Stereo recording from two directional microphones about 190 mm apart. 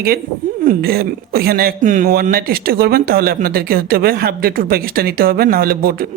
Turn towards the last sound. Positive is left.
turn(degrees=-50)  # may be behind; listen again after turning